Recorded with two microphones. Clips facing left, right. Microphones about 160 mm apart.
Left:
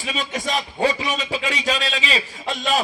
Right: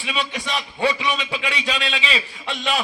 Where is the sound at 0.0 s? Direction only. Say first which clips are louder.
Left 1 dB; 40° left (ahead or behind).